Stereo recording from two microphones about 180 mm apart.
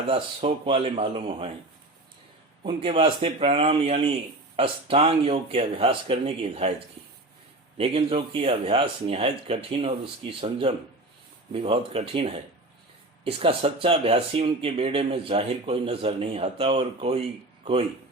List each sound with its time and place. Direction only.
0.1 s speech: 30° right (ahead or behind)
2.6 s speech: 30° right (ahead or behind)